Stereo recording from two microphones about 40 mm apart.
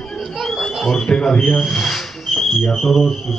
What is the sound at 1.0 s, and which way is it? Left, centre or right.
Speech, left.